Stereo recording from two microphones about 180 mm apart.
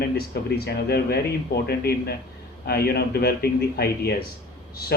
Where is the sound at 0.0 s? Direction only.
60° left (ahead or behind).